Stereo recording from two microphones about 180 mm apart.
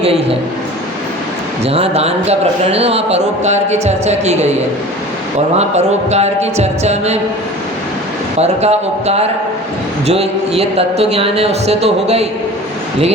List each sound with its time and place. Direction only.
1.6 s a man's voice: 35° right (ahead or behind)
5.5 s a man's voice: 40° right (ahead or behind)
8.4 s a man's voice: 35° right (ahead or behind)